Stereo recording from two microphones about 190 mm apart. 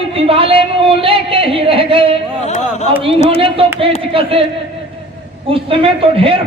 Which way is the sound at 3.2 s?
30° right (ahead or behind).